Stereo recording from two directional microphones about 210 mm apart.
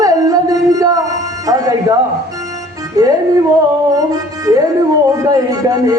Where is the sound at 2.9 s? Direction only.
15° right (ahead or behind).